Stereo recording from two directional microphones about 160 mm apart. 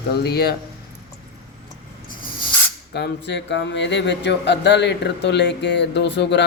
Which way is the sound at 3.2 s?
90° left.